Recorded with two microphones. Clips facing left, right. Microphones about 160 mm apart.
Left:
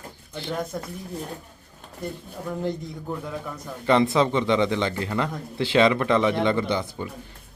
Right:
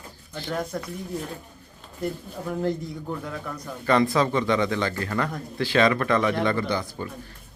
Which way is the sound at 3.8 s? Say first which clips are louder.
Left 1 dB; 20° left (ahead or behind).